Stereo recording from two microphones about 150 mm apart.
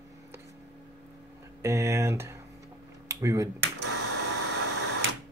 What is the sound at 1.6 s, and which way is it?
Speech, 20° right (ahead or behind).